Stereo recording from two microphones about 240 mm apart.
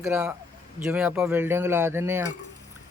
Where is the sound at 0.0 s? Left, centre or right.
Centre.